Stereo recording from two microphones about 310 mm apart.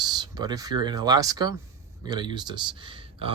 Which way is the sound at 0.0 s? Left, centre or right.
Centre.